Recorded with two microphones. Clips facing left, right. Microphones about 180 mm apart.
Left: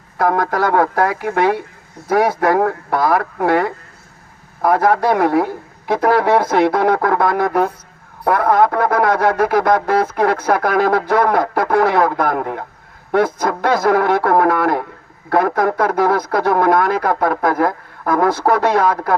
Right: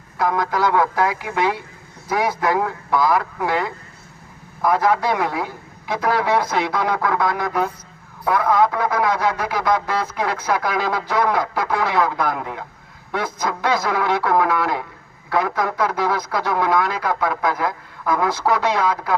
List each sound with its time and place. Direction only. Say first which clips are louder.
0.2 s speech: left 4 dB; 55° left (ahead or behind)